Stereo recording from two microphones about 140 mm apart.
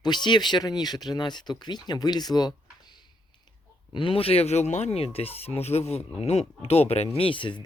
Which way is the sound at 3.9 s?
40° left (ahead or behind).